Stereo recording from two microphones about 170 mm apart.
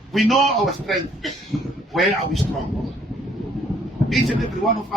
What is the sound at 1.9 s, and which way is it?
Speech, centre (ahead or behind).